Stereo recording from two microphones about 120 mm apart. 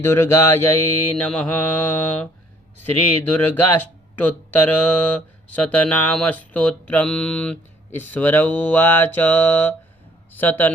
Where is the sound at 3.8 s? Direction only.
15° left (ahead or behind).